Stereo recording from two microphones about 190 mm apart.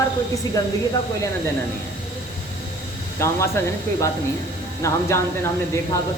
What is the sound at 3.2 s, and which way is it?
Speech, 15° left (ahead or behind).